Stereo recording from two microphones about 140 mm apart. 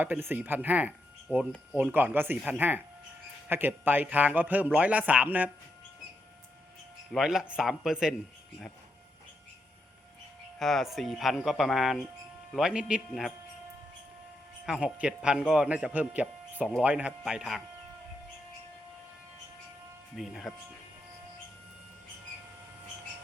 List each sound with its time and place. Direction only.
0.0 s speech: 15° right (ahead or behind)
7.1 s speech: centre (ahead or behind)
10.6 s speech: centre (ahead or behind)
14.7 s speech: 5° right (ahead or behind)
20.1 s speech: centre (ahead or behind)